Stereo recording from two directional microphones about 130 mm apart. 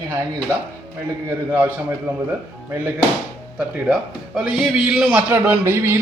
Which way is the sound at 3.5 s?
5° right (ahead or behind).